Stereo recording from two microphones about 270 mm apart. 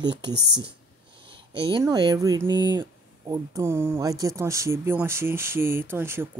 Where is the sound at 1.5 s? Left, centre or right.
Centre.